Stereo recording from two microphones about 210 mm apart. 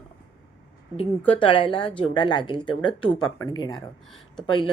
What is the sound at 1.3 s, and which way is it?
Speech, 25° left (ahead or behind).